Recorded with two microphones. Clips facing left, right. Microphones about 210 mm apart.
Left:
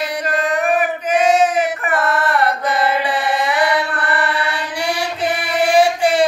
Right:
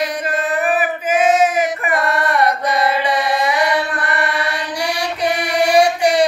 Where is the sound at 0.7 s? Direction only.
5° right (ahead or behind).